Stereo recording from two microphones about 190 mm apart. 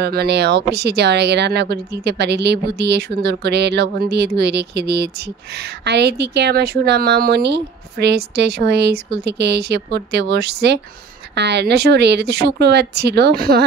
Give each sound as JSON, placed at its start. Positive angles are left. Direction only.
{"t": 0.0, "sound": "a woman's voice", "side_deg": -60}